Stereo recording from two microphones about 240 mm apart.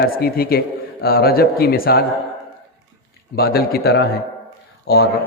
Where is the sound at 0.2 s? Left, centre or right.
Left.